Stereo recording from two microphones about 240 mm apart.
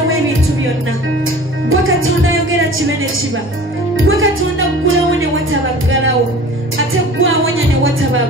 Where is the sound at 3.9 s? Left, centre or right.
Right.